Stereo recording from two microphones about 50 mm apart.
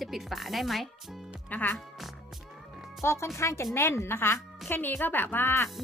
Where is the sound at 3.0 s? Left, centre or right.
Left.